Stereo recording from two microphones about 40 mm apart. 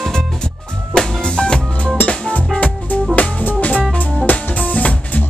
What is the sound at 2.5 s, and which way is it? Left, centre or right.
Music, left.